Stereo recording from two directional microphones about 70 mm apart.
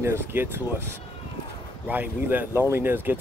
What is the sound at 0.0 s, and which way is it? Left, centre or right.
Speech, right.